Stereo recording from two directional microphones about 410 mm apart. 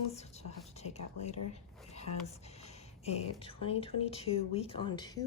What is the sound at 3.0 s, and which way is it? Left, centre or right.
Speech, centre.